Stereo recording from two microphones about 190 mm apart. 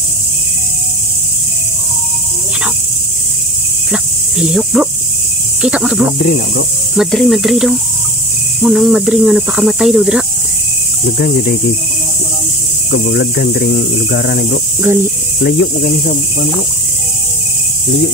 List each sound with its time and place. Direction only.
3.9 s cricket: 5° right (ahead or behind)
5.6 s speech: 5° right (ahead or behind)
6.1 s speech: 60° left (ahead or behind)
7.0 s speech: centre (ahead or behind)
11.1 s speech: 60° left (ahead or behind)
12.9 s speech: 55° left (ahead or behind)
14.8 s speech: 10° right (ahead or behind)
15.4 s speech: 55° left (ahead or behind)